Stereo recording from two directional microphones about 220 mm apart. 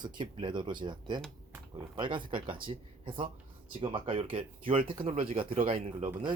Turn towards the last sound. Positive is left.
turn(degrees=-25)  # may be behind; listen again after turning